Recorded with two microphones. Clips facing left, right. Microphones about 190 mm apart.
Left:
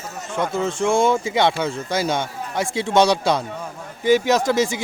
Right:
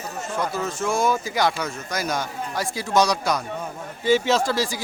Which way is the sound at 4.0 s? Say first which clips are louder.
Left 3 dB; 15° left (ahead or behind).